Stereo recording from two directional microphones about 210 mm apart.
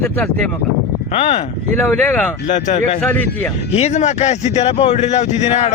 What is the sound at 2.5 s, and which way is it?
A man's voice, 35° left (ahead or behind).